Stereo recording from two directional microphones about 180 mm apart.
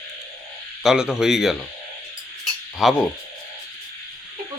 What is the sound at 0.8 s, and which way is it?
Speech, 5° right (ahead or behind).